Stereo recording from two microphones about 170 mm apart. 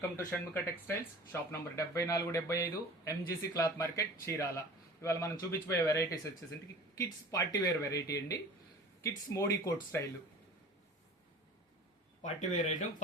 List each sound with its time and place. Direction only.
0.3 s speech: 10° left (ahead or behind)
12.2 s speech: 45° left (ahead or behind)